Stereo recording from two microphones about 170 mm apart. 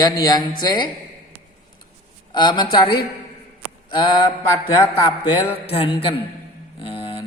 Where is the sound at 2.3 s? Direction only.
25° left (ahead or behind).